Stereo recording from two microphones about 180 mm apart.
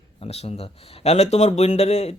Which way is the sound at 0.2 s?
35° left (ahead or behind).